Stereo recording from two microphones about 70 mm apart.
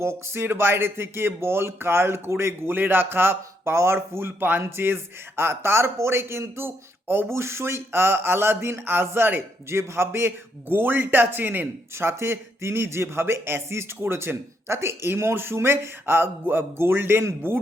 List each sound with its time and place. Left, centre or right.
0.0 s speech: right